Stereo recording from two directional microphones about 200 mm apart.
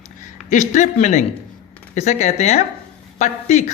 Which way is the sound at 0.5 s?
40° left (ahead or behind).